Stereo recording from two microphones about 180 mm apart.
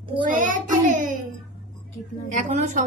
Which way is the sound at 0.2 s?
45° right (ahead or behind).